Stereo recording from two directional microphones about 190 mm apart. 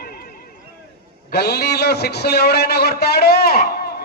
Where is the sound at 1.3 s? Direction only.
60° left (ahead or behind).